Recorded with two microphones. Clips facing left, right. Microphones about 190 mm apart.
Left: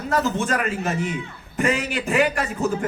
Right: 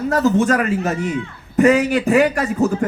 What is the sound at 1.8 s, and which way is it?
Speech, 40° right (ahead or behind).